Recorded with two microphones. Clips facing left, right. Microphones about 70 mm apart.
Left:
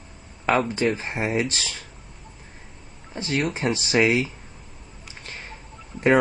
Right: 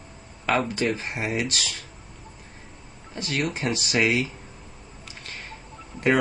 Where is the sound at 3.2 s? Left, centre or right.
Left.